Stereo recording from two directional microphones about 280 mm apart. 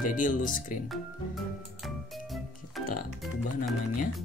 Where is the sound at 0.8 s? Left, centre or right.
Centre.